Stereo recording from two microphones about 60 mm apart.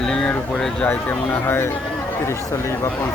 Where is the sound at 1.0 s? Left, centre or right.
Left.